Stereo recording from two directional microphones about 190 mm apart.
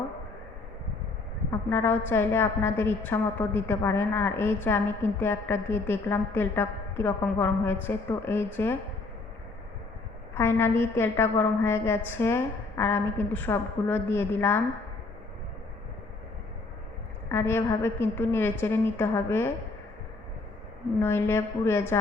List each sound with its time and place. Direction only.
1.7 s a woman's voice: 10° left (ahead or behind)
10.3 s a woman's voice: 15° left (ahead or behind)
17.2 s a woman's voice: 10° left (ahead or behind)
21.0 s a woman's voice: 15° left (ahead or behind)